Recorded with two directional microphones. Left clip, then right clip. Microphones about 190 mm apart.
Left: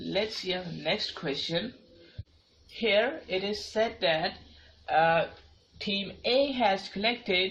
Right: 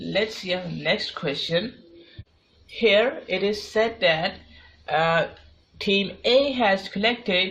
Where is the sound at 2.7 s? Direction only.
45° right (ahead or behind).